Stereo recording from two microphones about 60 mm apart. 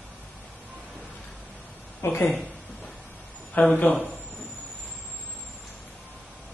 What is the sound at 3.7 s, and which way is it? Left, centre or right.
Speech, left.